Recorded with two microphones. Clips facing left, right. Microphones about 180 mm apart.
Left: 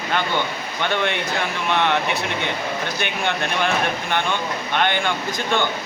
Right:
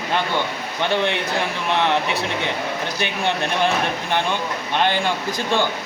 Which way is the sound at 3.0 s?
35° right (ahead or behind).